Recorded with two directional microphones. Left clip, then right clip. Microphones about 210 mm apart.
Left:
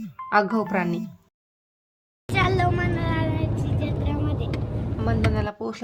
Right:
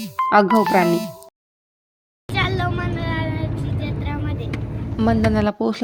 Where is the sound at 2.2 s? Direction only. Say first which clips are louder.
Even; 5° left (ahead or behind).